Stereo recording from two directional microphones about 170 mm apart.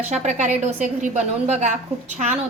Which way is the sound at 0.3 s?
45° right (ahead or behind).